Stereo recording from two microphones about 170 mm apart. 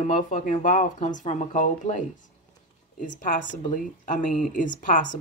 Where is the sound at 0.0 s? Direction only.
45° left (ahead or behind).